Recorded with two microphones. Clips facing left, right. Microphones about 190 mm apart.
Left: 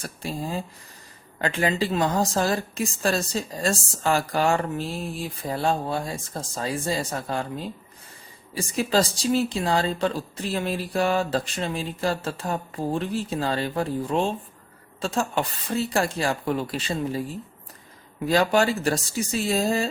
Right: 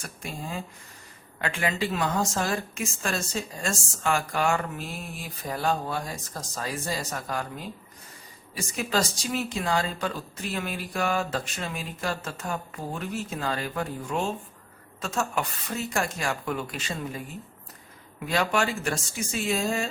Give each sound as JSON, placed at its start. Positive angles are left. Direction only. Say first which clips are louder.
{"t": 0.0, "sound": "a woman's voice", "louder": "left 6 dB", "side_deg": 35}
{"t": 8.5, "sound": "a woman's voice", "louder": "left 5 dB", "side_deg": 30}
{"t": 18.3, "sound": "a woman's voice", "louder": "left 5 dB", "side_deg": 35}